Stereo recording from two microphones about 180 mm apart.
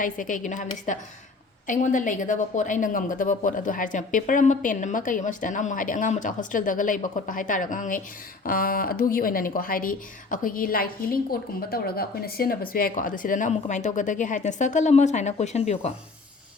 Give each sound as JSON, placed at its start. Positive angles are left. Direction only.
{"t": 0.0, "sound": "speech", "side_deg": 45}